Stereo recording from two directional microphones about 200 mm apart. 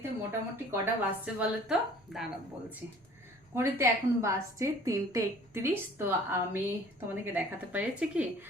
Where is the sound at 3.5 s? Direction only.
15° right (ahead or behind).